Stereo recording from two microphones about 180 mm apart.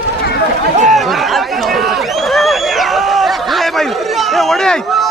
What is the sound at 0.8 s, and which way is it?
Chatter, centre (ahead or behind).